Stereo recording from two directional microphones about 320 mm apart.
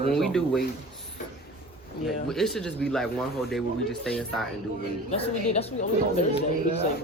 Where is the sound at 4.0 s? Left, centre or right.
Centre.